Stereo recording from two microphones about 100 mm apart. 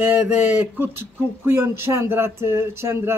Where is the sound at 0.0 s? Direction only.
20° right (ahead or behind).